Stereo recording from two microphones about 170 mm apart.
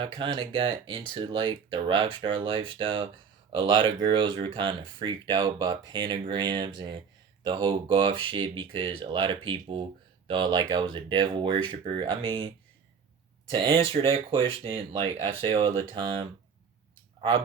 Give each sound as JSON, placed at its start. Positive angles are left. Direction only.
{"t": 0.0, "sound": "speech", "side_deg": -30}
{"t": 13.6, "sound": "speech", "side_deg": -30}